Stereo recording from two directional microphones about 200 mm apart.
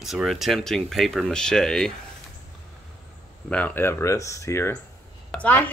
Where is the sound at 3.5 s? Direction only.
5° left (ahead or behind).